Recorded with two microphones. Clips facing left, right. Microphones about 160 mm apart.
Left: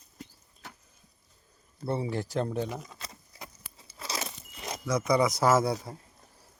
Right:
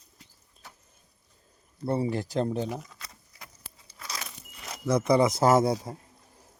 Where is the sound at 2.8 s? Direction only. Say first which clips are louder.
Left 2 dB; 25° left (ahead or behind).